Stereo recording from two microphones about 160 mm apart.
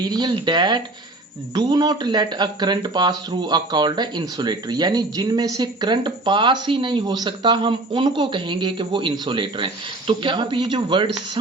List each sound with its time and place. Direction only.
0.0 s speech: 25° right (ahead or behind)